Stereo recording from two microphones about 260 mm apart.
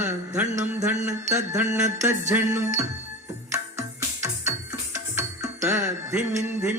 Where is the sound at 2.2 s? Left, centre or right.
Centre.